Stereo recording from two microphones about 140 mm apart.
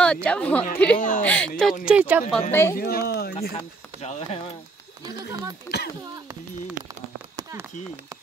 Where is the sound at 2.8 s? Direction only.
90° left.